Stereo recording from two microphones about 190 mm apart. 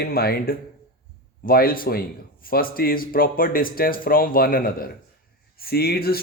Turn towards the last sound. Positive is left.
turn(degrees=55)  # may be behind; listen again after turning